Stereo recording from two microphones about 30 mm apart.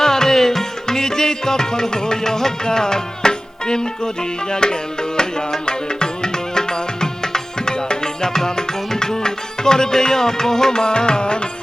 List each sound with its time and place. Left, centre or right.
0.0 s music: centre; by 11.4 s left